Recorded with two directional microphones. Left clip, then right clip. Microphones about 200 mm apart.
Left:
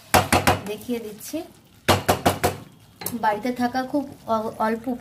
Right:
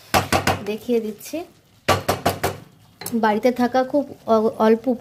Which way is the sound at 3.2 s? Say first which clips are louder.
Right 5 dB; 50° right (ahead or behind).